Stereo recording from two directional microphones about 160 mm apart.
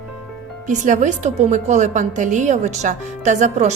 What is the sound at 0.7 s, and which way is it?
A woman's voice, 50° right (ahead or behind).